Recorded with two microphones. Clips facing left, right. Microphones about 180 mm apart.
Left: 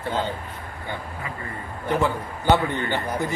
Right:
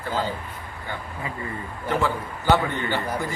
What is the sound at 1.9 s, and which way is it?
A man's voice, 20° left (ahead or behind).